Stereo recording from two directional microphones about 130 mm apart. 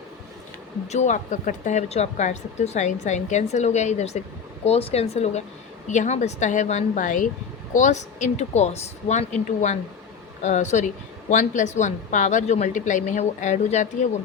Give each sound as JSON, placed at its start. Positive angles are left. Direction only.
{"t": 0.9, "sound": "a woman's voice", "side_deg": 65}
{"t": 7.7, "sound": "a woman's voice", "side_deg": 70}